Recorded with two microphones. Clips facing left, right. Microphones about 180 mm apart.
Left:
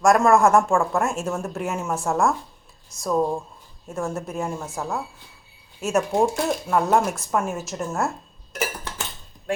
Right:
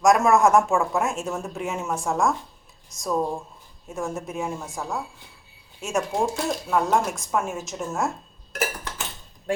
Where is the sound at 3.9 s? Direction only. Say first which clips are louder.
Left 2 dB; centre (ahead or behind).